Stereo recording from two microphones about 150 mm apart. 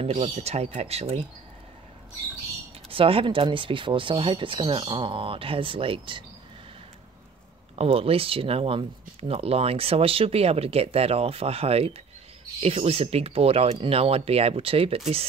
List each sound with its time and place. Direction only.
0.0 s speech: 45° right (ahead or behind)
2.9 s speech: 40° right (ahead or behind)
7.7 s speech: 40° right (ahead or behind)